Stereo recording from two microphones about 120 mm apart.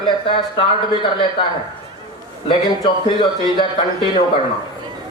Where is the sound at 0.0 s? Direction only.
45° left (ahead or behind).